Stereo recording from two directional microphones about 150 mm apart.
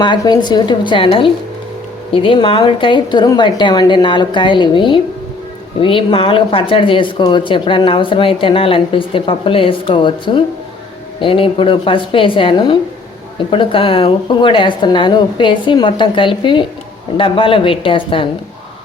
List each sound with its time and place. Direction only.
0.0 s speech: 30° left (ahead or behind)